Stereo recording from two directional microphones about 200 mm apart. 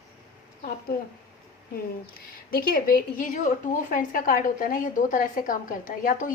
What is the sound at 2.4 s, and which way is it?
A woman's voice, 45° left (ahead or behind).